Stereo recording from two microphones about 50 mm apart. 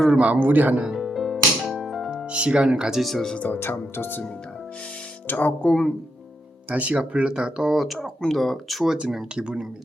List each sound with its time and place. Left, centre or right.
0.3 s speech: right
0.9 s music: centre
2.3 s speech: right
2.6 s speech: centre
3.0 s speech: centre
3.3 s speech: left
3.6 s speech: left
5.3 s speech: left
5.6 s speech: centre
6.7 s speech: right; by 7.9 s centre
8.2 s speech: centre
9.3 s speech: centre